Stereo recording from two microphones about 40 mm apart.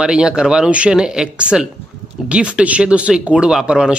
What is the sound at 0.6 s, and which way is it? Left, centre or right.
Speech, right.